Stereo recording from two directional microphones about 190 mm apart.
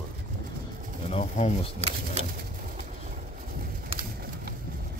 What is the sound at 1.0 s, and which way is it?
Speech, 35° left (ahead or behind).